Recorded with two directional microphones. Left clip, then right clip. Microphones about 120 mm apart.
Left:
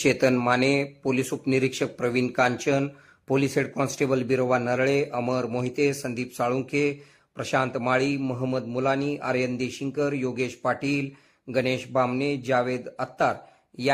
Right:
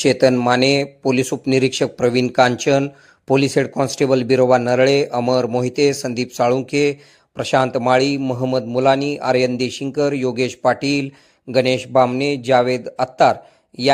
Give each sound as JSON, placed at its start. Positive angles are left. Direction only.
{"t": 0.0, "sound": "speech", "side_deg": -30}